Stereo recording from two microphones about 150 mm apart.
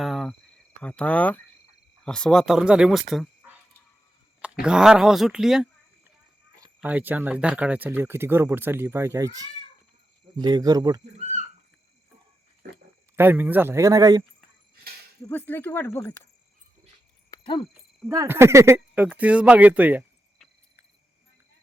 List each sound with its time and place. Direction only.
0.0 s cricket: centre (ahead or behind)
0.8 s speech: 10° left (ahead or behind)
4.6 s speech: 5° right (ahead or behind)
6.8 s speech: 10° right (ahead or behind)
13.1 s speech: 10° right (ahead or behind)
15.3 s speech: 15° left (ahead or behind)
17.3 s a sound: 20° left (ahead or behind)
18.1 s speech: 20° right (ahead or behind)